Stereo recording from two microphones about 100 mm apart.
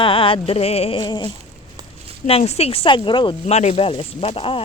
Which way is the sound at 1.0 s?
50° left (ahead or behind).